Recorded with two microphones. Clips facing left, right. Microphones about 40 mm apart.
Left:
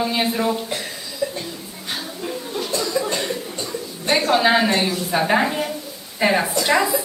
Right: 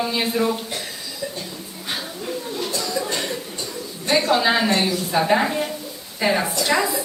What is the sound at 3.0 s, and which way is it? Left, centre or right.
Chuckle, left.